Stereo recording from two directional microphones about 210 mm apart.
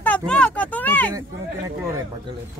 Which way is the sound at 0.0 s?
5° left (ahead or behind).